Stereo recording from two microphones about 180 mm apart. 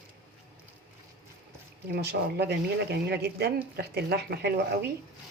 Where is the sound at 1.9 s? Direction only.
60° right (ahead or behind).